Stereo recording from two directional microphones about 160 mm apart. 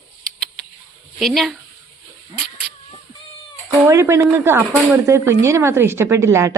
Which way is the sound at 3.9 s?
15° right (ahead or behind).